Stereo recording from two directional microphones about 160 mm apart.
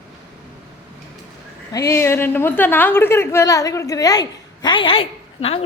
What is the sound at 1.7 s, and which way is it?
A woman's voice, 20° left (ahead or behind).